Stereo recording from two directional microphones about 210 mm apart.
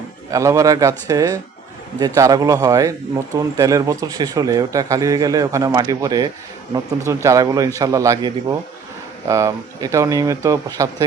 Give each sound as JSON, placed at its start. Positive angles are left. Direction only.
{"t": 0.3, "sound": "speech", "side_deg": -15}